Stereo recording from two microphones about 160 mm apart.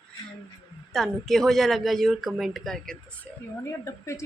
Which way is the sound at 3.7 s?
15° left (ahead or behind).